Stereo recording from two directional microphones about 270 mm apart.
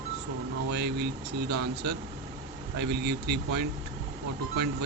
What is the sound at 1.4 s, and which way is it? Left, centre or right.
Speech, right.